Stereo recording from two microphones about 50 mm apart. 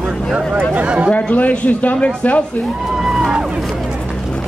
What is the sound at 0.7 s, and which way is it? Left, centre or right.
Speech, right.